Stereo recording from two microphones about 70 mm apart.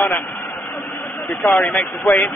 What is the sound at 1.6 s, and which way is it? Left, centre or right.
Speech, left.